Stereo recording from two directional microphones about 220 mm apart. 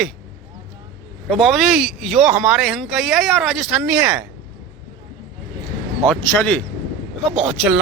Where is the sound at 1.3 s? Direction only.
Centre (ahead or behind).